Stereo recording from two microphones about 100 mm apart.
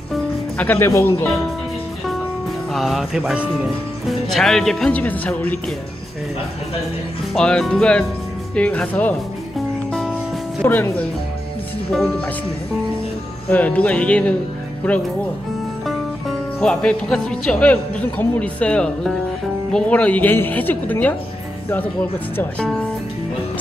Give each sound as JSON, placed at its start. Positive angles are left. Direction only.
{"t": 0.6, "sound": "speech", "side_deg": 20}
{"t": 2.7, "sound": "a man's voice", "side_deg": 0}
{"t": 7.3, "sound": "a man's voice", "side_deg": 5}
{"t": 10.6, "sound": "a man's voice", "side_deg": 15}
{"t": 13.5, "sound": "a man's voice", "side_deg": 15}
{"t": 15.8, "sound": "music", "side_deg": 0}
{"t": 16.5, "sound": "a man's voice", "side_deg": 10}